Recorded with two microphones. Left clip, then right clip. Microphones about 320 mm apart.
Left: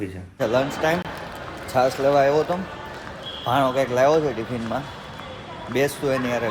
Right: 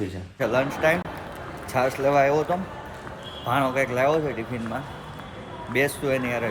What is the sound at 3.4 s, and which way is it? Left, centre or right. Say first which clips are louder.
Speech: left 3 dB; centre.